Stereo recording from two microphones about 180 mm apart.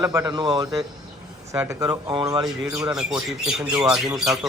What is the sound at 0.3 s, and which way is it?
Speech, 25° right (ahead or behind).